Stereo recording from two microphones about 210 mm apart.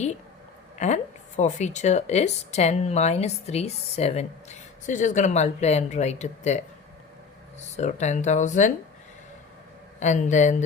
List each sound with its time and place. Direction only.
0.8 s speech: 35° left (ahead or behind)
7.8 s speech: 35° left (ahead or behind)
10.0 s speech: 35° left (ahead or behind)